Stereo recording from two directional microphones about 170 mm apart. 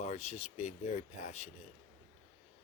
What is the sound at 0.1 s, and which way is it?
Speech, 40° left (ahead or behind).